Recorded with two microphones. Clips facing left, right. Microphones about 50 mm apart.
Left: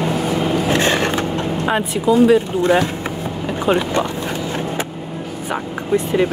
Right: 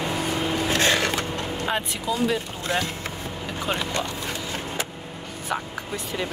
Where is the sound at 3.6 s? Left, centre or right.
Left.